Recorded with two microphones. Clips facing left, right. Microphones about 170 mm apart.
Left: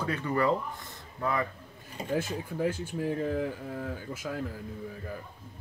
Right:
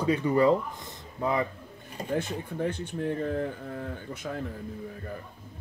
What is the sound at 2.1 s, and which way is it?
Speech, 5° left (ahead or behind).